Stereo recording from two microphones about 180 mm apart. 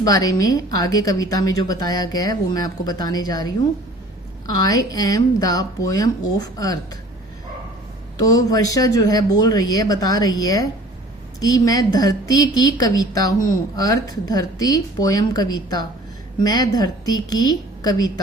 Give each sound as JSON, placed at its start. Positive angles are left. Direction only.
{"t": 0.0, "sound": "a woman's voice", "side_deg": 20}
{"t": 4.6, "sound": "a woman's voice", "side_deg": 20}
{"t": 8.2, "sound": "a woman's voice", "side_deg": 20}